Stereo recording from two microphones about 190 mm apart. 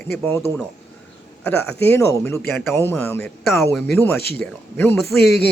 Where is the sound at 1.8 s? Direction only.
10° left (ahead or behind).